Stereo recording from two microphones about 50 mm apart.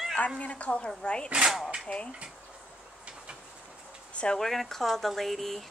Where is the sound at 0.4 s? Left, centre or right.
Left.